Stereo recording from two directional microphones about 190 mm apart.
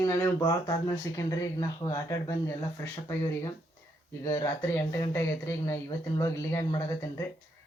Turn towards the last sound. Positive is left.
turn(degrees=15)  # may be behind; listen again after turning